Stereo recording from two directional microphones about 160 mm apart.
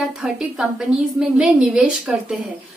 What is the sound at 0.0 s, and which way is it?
A woman's voice, 5° right (ahead or behind).